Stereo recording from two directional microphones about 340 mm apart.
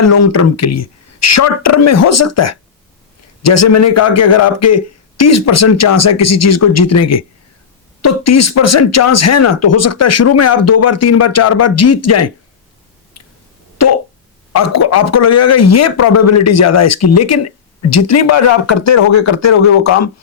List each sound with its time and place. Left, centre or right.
0.0 s a man's voice: left
14.5 s a man's voice: left